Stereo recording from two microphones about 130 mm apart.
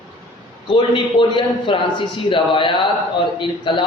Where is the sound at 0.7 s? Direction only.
35° left (ahead or behind).